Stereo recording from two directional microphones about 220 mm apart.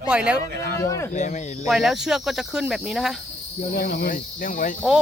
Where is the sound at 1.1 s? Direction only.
35° left (ahead or behind).